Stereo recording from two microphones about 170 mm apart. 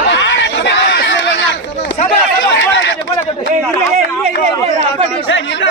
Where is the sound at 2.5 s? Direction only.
90° left.